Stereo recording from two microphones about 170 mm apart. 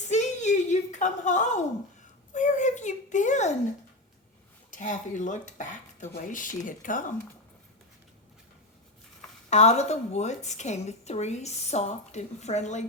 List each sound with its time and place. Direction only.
0.1 s a sound: 45° left (ahead or behind)
2.3 s speech: 45° left (ahead or behind)
4.7 s speech: 50° left (ahead or behind)
9.5 s a woman's voice: 40° left (ahead or behind)